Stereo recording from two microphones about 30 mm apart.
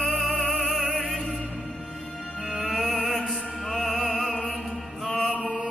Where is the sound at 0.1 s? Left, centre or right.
Left.